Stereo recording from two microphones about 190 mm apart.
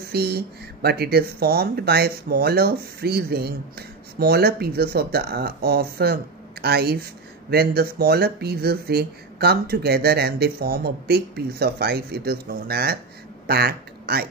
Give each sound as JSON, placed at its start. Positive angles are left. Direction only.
{"t": 0.1, "sound": "speech", "side_deg": -55}